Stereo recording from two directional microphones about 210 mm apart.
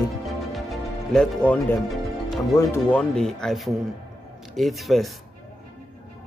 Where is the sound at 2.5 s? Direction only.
15° left (ahead or behind).